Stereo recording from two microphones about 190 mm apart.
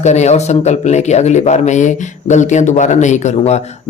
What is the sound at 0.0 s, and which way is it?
Speech, 35° left (ahead or behind).